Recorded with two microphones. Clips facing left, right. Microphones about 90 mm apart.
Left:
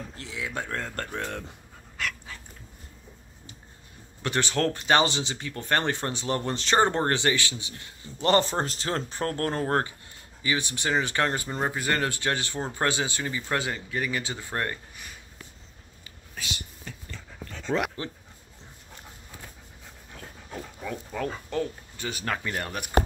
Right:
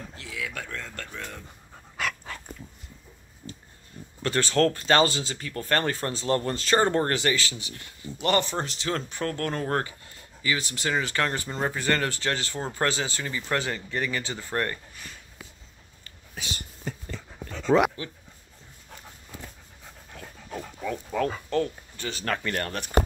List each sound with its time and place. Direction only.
0.2 s speech: 30° left (ahead or behind)
0.7 s speech: 45° left (ahead or behind)
2.3 s dog: 65° right (ahead or behind)
4.2 s speech: 20° left (ahead or behind)
16.4 s whispering: 35° right (ahead or behind)
17.7 s speech: 45° right (ahead or behind)
21.1 s speech: centre (ahead or behind)
21.5 s speech: 15° left (ahead or behind)